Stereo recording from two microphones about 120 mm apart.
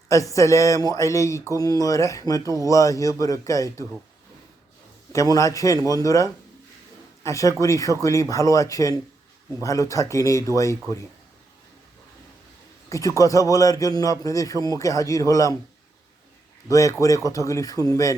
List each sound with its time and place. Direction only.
0.1 s a man's voice: 25° left (ahead or behind)
5.1 s a man's voice: 30° left (ahead or behind)
12.9 s a man's voice: 25° left (ahead or behind)
16.6 s a man's voice: 25° left (ahead or behind)